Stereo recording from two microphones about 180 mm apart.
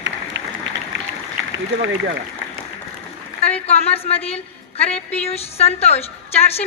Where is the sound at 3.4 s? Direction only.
35° left (ahead or behind).